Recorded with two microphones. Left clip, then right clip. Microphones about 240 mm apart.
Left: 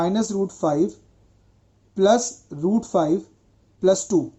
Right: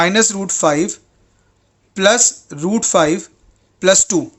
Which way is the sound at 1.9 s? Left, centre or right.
Right.